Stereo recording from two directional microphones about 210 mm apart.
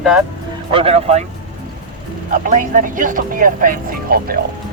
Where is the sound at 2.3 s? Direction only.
40° right (ahead or behind).